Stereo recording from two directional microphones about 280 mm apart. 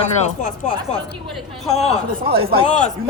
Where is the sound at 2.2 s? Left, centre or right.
Centre.